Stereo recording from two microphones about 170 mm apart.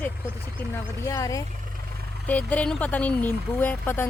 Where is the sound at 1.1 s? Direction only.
20° left (ahead or behind).